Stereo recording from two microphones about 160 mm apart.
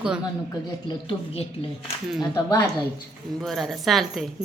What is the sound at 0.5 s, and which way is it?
A woman's voice, 30° left (ahead or behind).